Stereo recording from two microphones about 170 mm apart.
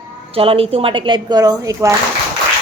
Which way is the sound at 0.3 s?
35° right (ahead or behind).